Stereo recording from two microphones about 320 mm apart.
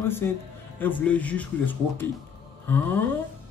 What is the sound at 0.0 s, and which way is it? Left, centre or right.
A man's voice, centre.